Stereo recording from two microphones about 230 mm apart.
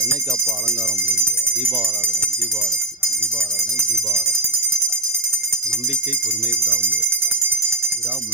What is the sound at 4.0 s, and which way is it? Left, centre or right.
Music, centre.